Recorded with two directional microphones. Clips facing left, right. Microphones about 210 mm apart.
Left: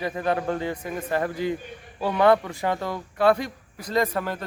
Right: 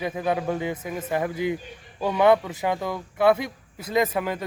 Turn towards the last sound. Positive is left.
turn(degrees=-5)  # may be behind; listen again after turning